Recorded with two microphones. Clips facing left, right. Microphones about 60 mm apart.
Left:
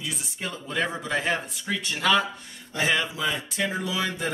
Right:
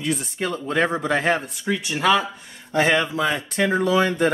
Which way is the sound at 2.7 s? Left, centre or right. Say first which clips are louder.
Right 6 dB; right.